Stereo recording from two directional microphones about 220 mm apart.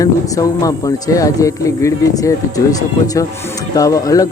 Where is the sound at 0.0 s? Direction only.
15° left (ahead or behind).